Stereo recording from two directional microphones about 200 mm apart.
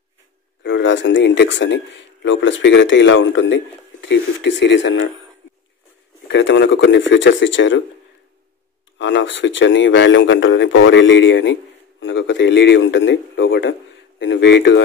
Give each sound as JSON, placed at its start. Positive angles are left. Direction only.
{"t": 0.7, "sound": "speech", "side_deg": 65}
{"t": 6.2, "sound": "speech", "side_deg": 65}
{"t": 8.9, "sound": "speech", "side_deg": 65}